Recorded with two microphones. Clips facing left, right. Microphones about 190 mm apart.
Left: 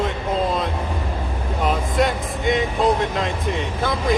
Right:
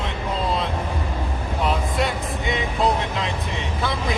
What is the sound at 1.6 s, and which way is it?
Speech, 50° left (ahead or behind).